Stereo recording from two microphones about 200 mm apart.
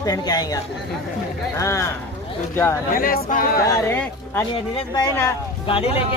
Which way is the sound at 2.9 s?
45° left (ahead or behind).